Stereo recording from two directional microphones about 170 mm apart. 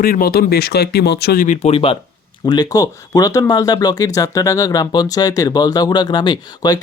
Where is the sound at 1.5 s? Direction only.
35° left (ahead or behind).